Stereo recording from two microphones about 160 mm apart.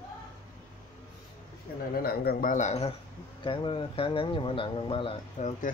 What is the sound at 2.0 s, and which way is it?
Speech, 70° left (ahead or behind).